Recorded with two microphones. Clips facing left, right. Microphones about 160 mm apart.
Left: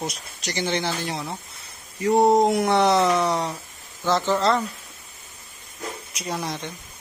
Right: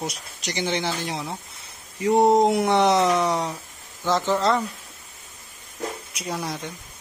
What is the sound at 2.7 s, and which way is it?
Speech, 15° right (ahead or behind).